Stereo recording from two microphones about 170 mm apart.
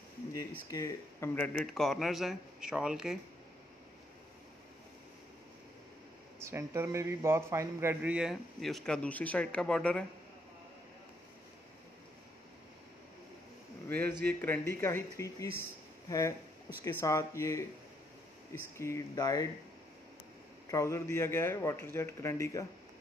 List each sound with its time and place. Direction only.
0.3 s a man's voice: 20° left (ahead or behind); by 3.2 s 5° right (ahead or behind)
6.4 s a man's voice: 15° right (ahead or behind); by 10.0 s 5° left (ahead or behind)
14.2 s a man's voice: 10° left (ahead or behind)
20.6 s a man's voice: 20° left (ahead or behind)